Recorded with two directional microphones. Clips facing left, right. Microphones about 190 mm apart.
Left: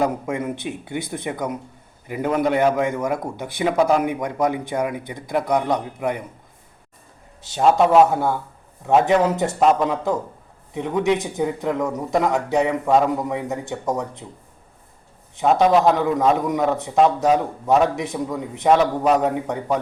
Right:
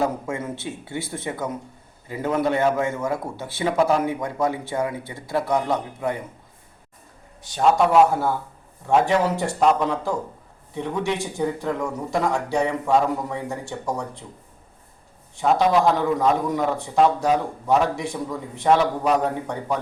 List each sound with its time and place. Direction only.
0.0 s a man's voice: 15° left (ahead or behind)
7.4 s a man's voice: 25° left (ahead or behind)
15.4 s a man's voice: 20° left (ahead or behind)